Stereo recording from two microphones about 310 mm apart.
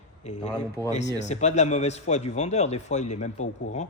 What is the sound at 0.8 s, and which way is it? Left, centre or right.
Speech, centre.